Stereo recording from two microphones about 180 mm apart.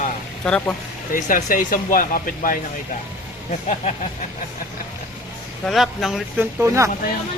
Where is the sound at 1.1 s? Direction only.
45° left (ahead or behind).